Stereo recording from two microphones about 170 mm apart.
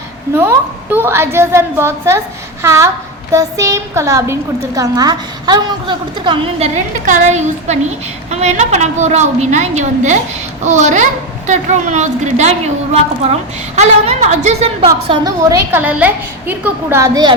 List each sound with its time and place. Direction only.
0.3 s a woman's voice: 15° right (ahead or behind); by 6.7 s 30° right (ahead or behind)
7.0 s a woman's voice: 45° right (ahead or behind)
13.7 s a woman's voice: 40° right (ahead or behind)
15.0 s a woman's voice: 25° right (ahead or behind)
15.8 s a woman's voice: 10° right (ahead or behind)